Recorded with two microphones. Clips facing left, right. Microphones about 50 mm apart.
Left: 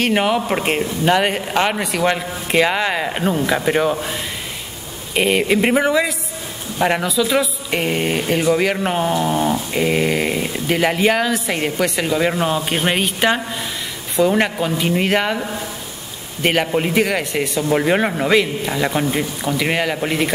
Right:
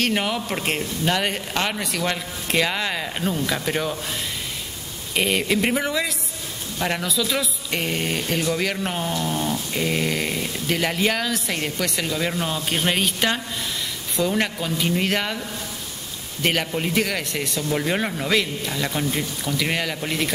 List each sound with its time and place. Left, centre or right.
0.0 s a man's voice: centre